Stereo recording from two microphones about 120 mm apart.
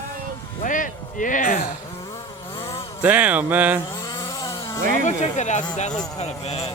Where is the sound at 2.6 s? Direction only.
25° left (ahead or behind).